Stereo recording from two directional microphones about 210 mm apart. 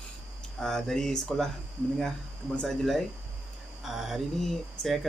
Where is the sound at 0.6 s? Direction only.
Centre (ahead or behind).